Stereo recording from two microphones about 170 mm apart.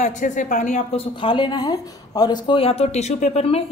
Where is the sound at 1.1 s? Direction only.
30° left (ahead or behind).